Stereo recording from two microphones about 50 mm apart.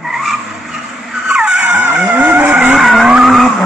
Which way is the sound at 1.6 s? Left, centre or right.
Right.